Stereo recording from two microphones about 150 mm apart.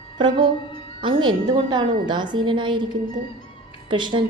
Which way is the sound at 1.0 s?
30° right (ahead or behind).